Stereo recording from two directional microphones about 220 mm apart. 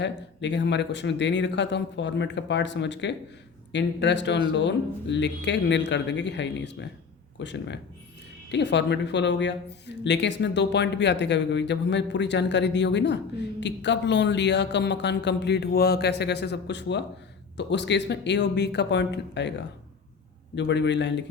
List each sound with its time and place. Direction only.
0.0 s speech: 55° left (ahead or behind)